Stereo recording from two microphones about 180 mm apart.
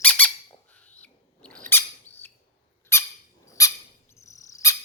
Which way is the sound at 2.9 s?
15° left (ahead or behind).